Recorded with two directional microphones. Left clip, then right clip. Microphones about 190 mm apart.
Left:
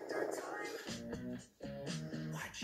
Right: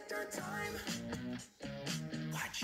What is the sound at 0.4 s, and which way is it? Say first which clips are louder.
Music: right 2 dB; 30° right (ahead or behind).